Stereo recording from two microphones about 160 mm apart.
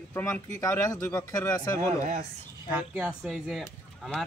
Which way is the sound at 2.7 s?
10° right (ahead or behind).